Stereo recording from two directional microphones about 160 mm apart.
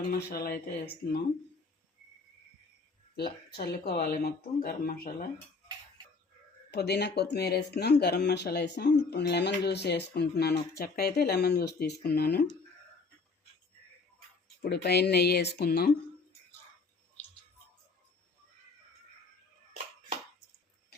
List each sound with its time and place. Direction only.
0.1 s speech: 75° left (ahead or behind)
3.2 s speech: 80° left
6.7 s speech: 90° left
14.6 s speech: 90° left
15.5 s speech: 75° left (ahead or behind)